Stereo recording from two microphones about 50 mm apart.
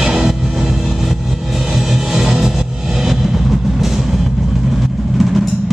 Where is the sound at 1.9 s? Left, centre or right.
Centre.